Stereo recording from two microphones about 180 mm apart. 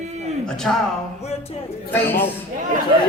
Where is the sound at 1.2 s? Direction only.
35° left (ahead or behind).